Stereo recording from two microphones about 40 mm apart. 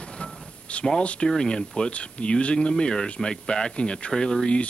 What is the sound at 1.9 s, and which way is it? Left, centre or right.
Speech, left.